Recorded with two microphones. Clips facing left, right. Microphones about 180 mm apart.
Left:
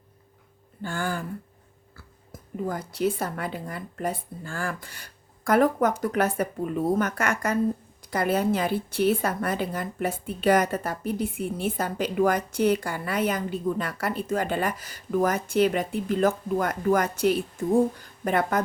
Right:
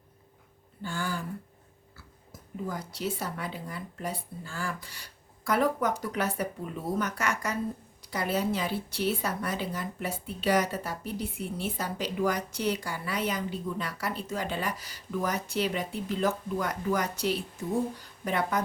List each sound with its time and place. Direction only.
0.8 s a woman's voice: 55° left (ahead or behind)
2.6 s a woman's voice: 55° left (ahead or behind)